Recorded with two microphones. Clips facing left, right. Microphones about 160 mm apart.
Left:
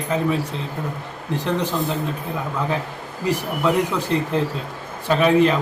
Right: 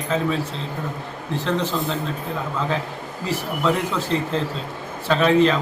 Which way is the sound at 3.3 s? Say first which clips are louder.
Left 2 dB; 15° left (ahead or behind).